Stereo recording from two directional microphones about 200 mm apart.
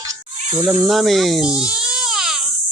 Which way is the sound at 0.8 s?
Centre (ahead or behind).